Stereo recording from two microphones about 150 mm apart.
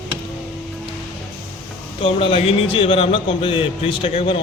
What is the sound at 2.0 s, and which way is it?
Speech, 40° left (ahead or behind).